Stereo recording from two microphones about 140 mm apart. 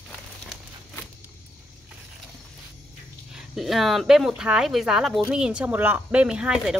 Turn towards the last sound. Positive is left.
turn(degrees=-5)  # may be behind; listen again after turning